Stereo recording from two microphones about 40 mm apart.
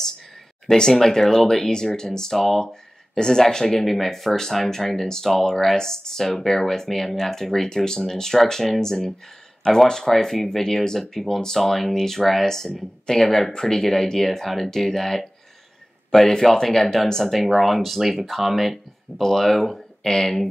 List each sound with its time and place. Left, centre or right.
0.7 s speech: centre